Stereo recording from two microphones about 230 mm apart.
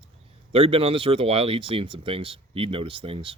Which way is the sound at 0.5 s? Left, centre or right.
Right.